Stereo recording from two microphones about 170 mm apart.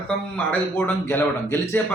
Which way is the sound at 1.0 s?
10° left (ahead or behind).